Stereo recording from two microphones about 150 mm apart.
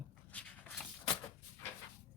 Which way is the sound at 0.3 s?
5° left (ahead or behind).